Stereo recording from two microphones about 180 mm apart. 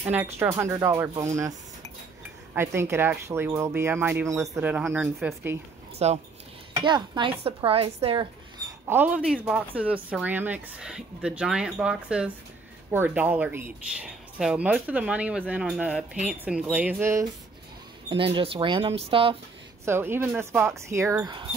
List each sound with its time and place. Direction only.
0.1 s speech: 10° right (ahead or behind)
2.5 s speech: 15° right (ahead or behind)
6.0 s speech: 35° right (ahead or behind)
8.6 s speech: 10° right (ahead or behind)
18.1 s speech: 30° right (ahead or behind)
19.8 s speech: 15° right (ahead or behind)